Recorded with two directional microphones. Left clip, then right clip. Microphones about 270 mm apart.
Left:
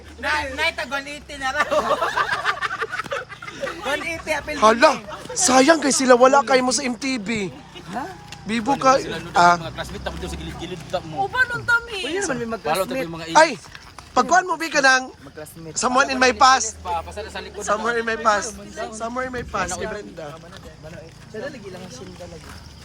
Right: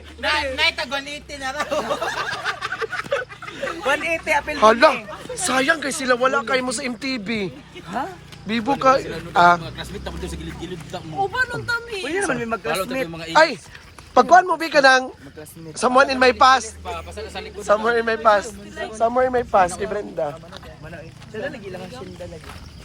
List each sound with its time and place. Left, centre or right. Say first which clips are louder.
0.2 s speech: right 2 dB; centre
3.9 s speech: right 6 dB; centre
4.5 s speech: even; centre
7.9 s speech: right 3 dB; centre
8.4 s speech: even; centre
11.3 s speech: left 7 dB; centre
12.0 s speech: right 2 dB; centre
12.6 s speech: left 4 dB; left
13.3 s speech: left 1 dB; centre
16.9 s speech: left 2 dB; left
17.6 s speech: right 4 dB; centre